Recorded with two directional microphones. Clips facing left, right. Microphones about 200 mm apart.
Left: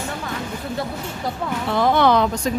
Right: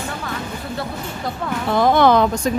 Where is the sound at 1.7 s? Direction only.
45° right (ahead or behind).